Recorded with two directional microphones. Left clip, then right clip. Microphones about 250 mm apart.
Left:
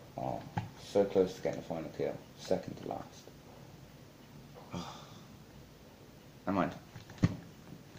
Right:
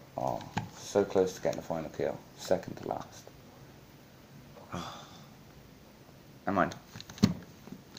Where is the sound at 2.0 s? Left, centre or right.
Right.